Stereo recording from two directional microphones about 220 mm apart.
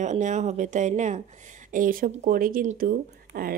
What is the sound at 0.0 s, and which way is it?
A woman's voice, 35° right (ahead or behind).